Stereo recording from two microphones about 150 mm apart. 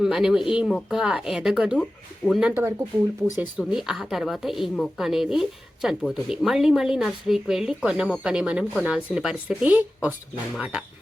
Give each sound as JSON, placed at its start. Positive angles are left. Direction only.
{"t": 0.0, "sound": "a woman's voice", "side_deg": -5}
{"t": 2.5, "sound": "a woman's voice", "side_deg": -15}